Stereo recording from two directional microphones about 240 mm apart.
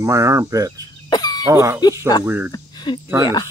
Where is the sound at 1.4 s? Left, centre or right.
Centre.